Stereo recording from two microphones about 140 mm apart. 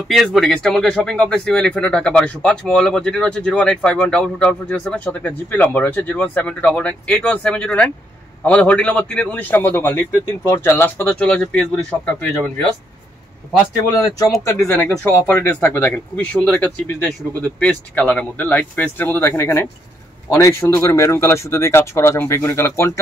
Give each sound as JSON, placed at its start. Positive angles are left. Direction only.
{"t": 0.1, "sound": "speech", "side_deg": 0}
{"t": 14.8, "sound": "speech", "side_deg": 15}